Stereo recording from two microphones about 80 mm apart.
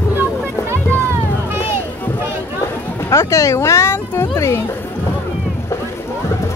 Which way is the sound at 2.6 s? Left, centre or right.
Left.